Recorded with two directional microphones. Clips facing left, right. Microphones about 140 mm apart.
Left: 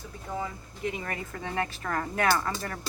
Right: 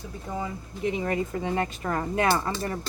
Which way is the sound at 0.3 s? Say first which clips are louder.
Right 2 dB; 20° right (ahead or behind).